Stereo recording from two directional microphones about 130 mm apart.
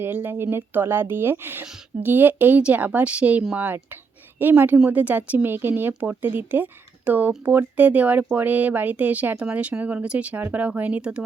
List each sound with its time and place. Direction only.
0.0 s speech: 15° right (ahead or behind)